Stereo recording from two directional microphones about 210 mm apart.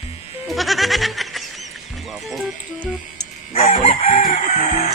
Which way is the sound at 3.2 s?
30° left (ahead or behind).